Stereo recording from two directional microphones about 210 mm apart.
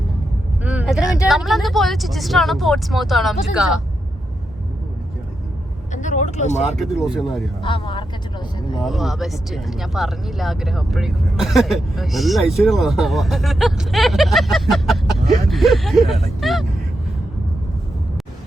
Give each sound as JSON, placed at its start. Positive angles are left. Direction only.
{"t": 0.6, "sound": "vehicle", "side_deg": -5}
{"t": 1.3, "sound": "speech", "side_deg": 0}
{"t": 5.9, "sound": "speech", "side_deg": 35}
{"t": 6.7, "sound": "speech", "side_deg": 0}
{"t": 7.6, "sound": "speech", "side_deg": 25}
{"t": 8.8, "sound": "speech", "side_deg": 0}